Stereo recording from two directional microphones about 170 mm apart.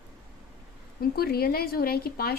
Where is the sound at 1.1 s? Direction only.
65° left (ahead or behind).